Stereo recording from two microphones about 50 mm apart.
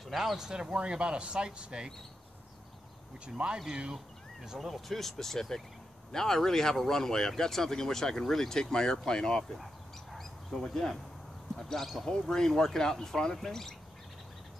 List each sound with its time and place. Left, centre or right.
0.1 s speech: centre
0.5 s speech: centre
3.3 s speech: centre
4.5 s speech: centre
10.1 s a sound: centre
11.5 s speech: centre